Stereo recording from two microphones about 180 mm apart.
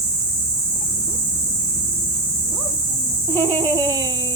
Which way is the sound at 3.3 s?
20° right (ahead or behind).